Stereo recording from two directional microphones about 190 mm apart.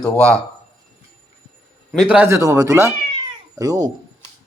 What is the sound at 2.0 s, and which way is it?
Speech, 5° right (ahead or behind).